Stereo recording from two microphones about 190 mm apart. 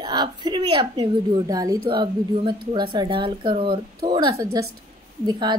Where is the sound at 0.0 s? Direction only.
20° right (ahead or behind).